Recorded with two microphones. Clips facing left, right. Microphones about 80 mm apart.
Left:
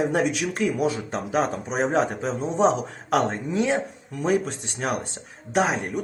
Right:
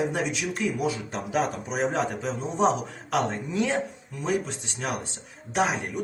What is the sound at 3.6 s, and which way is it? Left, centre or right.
Speech, left.